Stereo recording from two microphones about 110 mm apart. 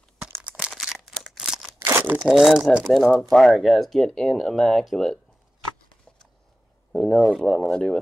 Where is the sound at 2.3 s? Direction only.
Centre (ahead or behind).